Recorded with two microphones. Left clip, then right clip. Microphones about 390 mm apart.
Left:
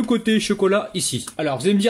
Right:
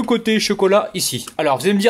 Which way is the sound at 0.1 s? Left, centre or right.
Centre.